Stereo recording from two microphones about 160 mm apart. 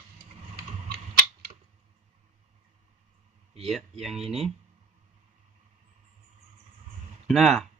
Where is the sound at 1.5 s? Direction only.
25° right (ahead or behind).